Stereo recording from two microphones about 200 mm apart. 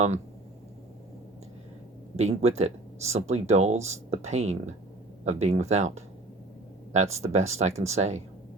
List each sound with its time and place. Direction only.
2.1 s speech: 35° right (ahead or behind)